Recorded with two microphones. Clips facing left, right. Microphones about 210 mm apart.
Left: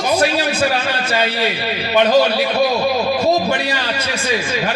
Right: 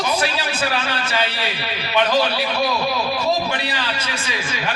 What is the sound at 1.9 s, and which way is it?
Speech, 40° left (ahead or behind).